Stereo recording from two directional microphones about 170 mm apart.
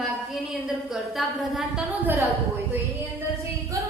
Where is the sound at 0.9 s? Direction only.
Centre (ahead or behind).